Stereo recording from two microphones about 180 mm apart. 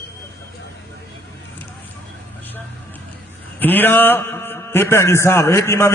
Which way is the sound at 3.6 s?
10° left (ahead or behind).